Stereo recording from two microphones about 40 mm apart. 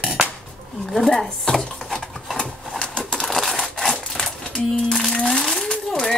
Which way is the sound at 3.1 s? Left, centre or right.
Centre.